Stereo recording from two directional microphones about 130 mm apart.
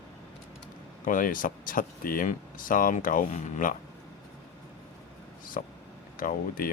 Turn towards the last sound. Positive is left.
turn(degrees=90)